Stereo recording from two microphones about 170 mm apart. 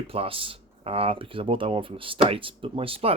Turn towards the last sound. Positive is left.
turn(degrees=-35)  # may be behind; listen again after turning